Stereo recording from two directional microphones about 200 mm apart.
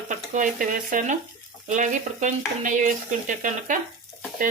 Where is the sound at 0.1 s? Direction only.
40° right (ahead or behind).